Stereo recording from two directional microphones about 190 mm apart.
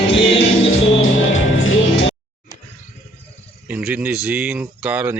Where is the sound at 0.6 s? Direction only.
90° left.